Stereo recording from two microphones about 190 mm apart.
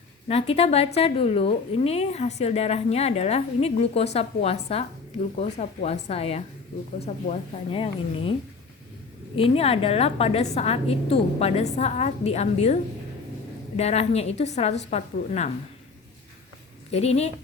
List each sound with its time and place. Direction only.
0.3 s a woman's voice: 30° left (ahead or behind)
9.3 s a woman's voice: 30° left (ahead or behind)
16.9 s a woman's voice: 35° left (ahead or behind)